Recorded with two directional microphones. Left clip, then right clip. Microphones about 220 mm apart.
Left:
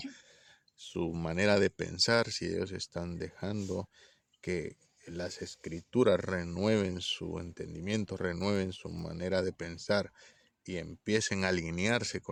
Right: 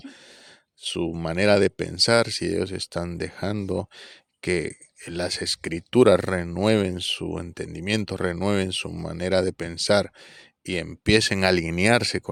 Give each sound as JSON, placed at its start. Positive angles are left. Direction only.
{"t": 0.9, "sound": "speech", "side_deg": -25}